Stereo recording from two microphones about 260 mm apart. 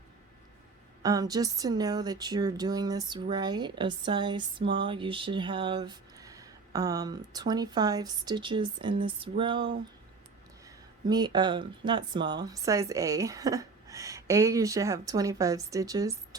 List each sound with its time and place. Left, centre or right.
1.0 s speech: centre
11.0 s speech: centre